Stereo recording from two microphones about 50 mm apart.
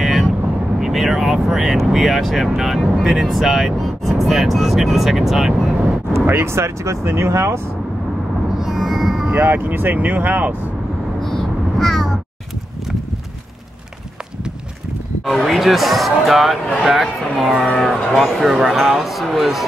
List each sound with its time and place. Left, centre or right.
0.0 s vehicle: centre
0.7 s speech: centre
6.2 s speech: right
6.5 s speech: right
8.5 s music: centre
9.5 s speech: right
11.1 s vehicle: centre
15.2 s speech: centre